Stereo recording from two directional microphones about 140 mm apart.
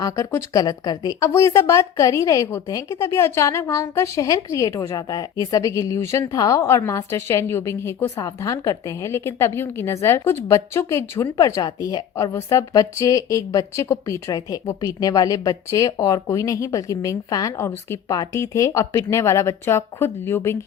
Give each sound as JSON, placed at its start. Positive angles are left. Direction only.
{"t": 0.0, "sound": "a woman's voice", "side_deg": 20}